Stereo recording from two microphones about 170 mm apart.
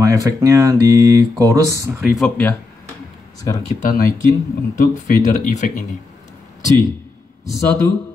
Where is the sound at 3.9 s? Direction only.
55° left (ahead or behind).